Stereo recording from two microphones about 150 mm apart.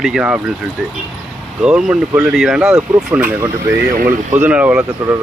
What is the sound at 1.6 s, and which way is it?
Speech, 5° right (ahead or behind).